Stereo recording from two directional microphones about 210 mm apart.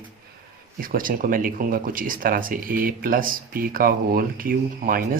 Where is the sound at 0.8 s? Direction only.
40° right (ahead or behind).